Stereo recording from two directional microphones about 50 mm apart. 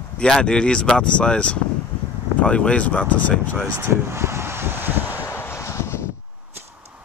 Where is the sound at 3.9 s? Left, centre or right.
Right.